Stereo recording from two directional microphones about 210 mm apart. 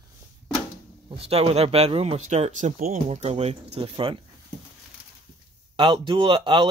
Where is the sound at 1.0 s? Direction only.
30° right (ahead or behind).